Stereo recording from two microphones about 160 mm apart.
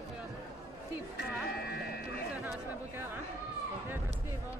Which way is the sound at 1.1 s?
85° left.